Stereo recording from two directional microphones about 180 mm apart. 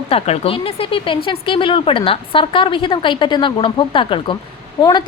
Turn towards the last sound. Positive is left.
turn(degrees=25)  # may be behind; listen again after turning